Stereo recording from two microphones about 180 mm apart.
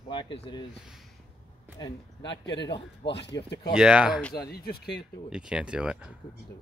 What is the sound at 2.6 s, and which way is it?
Speech, 30° left (ahead or behind).